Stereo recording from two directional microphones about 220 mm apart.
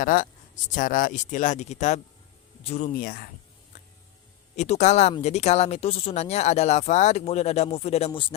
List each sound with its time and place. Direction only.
0.0 s speech: 40° left (ahead or behind)
4.5 s speech: 30° left (ahead or behind)